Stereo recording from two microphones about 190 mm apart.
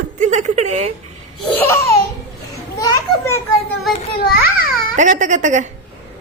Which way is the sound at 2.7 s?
20° left (ahead or behind).